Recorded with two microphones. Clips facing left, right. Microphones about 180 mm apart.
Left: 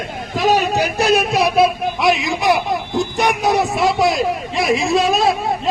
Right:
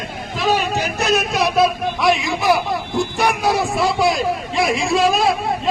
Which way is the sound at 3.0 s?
20° left (ahead or behind).